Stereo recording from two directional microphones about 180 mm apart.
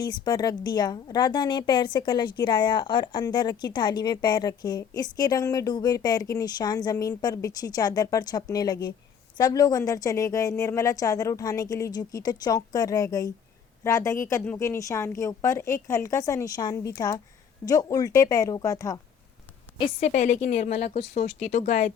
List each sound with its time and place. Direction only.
0.0 s a woman's voice: 25° left (ahead or behind)
20.0 s a woman's voice: 40° left (ahead or behind)
21.2 s a woman's voice: 40° left (ahead or behind)